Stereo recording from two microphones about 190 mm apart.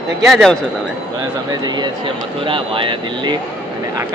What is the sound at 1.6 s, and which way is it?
Speech, 20° right (ahead or behind).